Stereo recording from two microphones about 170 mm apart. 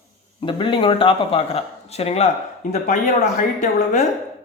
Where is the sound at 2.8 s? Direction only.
50° left (ahead or behind).